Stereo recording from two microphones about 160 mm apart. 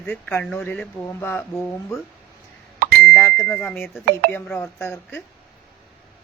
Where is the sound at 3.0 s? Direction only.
10° left (ahead or behind).